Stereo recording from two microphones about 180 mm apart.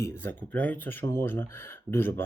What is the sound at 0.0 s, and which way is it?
Speech, 10° left (ahead or behind).